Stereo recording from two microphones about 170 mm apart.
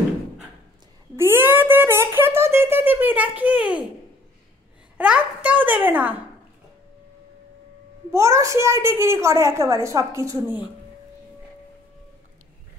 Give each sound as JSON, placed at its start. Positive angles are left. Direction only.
{"t": 1.1, "sound": "speech", "side_deg": -15}
{"t": 4.9, "sound": "speech", "side_deg": -10}
{"t": 8.1, "sound": "speech", "side_deg": -15}